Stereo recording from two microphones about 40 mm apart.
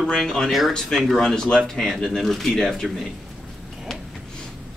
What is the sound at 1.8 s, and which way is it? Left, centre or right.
Speech, centre.